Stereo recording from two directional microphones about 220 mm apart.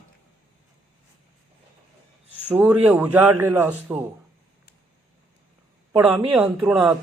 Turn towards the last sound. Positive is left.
turn(degrees=-5)  # may be behind; listen again after turning